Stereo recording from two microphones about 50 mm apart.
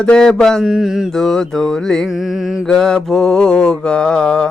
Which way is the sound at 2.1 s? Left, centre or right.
Centre.